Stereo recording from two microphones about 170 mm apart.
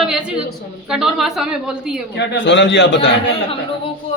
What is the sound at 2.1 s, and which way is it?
Speech, 90° left.